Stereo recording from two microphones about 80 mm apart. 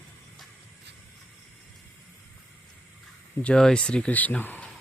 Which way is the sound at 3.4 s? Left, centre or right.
Centre.